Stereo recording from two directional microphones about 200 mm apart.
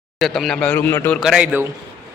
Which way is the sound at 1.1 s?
5° right (ahead or behind).